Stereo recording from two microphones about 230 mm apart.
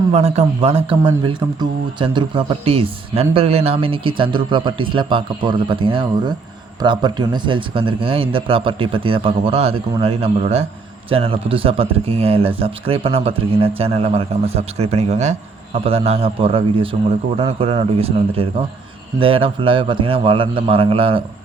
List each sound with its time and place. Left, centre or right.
0.1 s speech: right